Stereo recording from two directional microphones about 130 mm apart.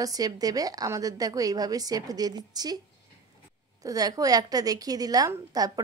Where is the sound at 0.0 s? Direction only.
30° right (ahead or behind).